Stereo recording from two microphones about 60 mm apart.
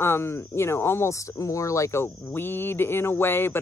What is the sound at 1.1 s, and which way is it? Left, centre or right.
Speech, left.